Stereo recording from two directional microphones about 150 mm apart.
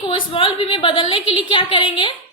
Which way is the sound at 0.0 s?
35° left (ahead or behind).